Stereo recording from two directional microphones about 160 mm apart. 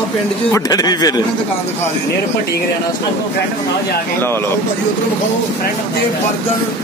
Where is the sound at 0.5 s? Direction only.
25° left (ahead or behind).